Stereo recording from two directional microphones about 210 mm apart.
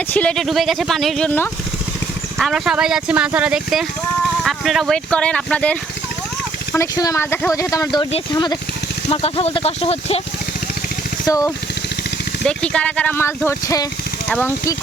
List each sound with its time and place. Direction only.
0.1 s speech: 5° left (ahead or behind)
6.7 s speech: 15° left (ahead or behind)
11.3 s speech: 15° left (ahead or behind)
12.5 s speech: 5° left (ahead or behind)